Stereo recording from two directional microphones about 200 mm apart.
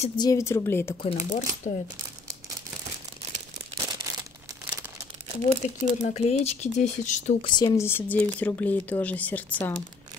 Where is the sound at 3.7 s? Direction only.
20° right (ahead or behind).